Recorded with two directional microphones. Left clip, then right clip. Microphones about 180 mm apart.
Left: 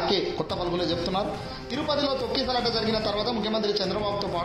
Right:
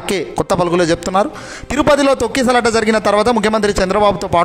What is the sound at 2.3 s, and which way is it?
A man's voice, 50° right (ahead or behind).